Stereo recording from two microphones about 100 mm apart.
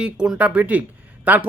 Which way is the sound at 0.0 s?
10° right (ahead or behind).